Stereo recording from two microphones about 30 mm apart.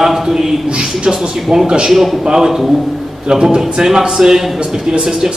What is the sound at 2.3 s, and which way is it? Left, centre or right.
Mantra, centre.